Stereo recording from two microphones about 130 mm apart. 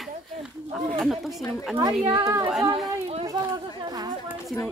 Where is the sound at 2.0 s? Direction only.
40° right (ahead or behind).